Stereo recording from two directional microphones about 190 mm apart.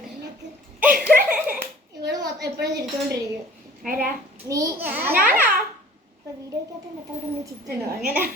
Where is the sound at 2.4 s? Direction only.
65° right (ahead or behind).